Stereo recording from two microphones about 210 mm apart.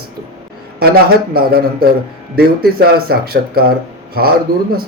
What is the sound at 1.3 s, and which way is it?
A man's voice, 45° right (ahead or behind).